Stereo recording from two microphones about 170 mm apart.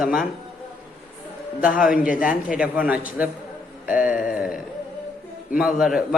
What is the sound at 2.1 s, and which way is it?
Speech, 55° left (ahead or behind).